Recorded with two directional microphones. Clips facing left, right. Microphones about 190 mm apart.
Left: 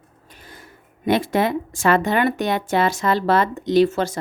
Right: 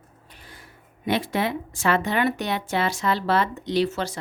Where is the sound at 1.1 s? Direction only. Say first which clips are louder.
Left 5 dB; 45° left (ahead or behind).